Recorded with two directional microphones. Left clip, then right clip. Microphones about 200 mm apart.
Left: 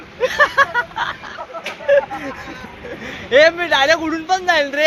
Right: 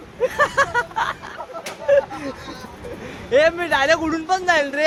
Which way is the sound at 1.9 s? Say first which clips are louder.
Left 2 dB; 15° right (ahead or behind).